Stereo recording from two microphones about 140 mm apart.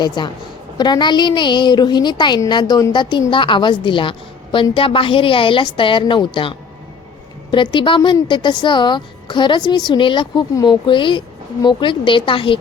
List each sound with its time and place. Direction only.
0.0 s a woman's voice: 30° left (ahead or behind)